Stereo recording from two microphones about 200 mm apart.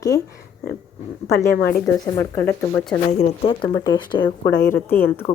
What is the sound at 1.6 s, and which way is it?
Speech, 50° left (ahead or behind).